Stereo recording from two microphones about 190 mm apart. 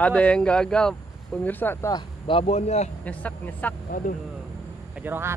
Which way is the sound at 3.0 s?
10° left (ahead or behind).